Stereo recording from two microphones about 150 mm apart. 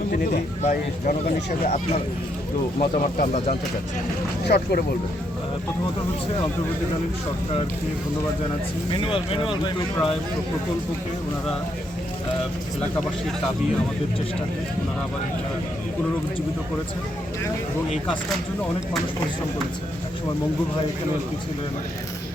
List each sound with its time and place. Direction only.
0.6 s speech: 55° left (ahead or behind)
4.4 s speech: 90° left
8.9 s speech: 35° left (ahead or behind)